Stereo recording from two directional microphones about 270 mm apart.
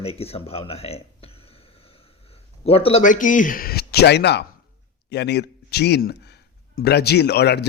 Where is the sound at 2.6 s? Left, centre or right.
Left.